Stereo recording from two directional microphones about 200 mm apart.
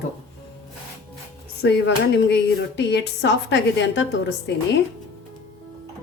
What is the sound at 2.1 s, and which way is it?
A woman's voice, 60° left (ahead or behind).